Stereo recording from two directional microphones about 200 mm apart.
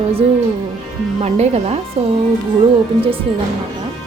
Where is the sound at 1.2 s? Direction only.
35° right (ahead or behind).